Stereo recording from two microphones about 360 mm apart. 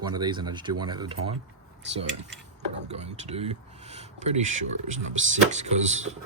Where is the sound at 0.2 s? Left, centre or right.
Centre.